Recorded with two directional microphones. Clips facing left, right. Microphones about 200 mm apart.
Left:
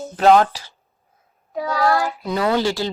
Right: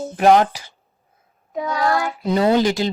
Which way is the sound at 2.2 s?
25° right (ahead or behind).